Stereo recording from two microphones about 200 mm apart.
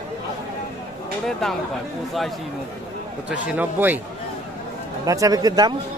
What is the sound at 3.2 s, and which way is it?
Speech, 5° right (ahead or behind).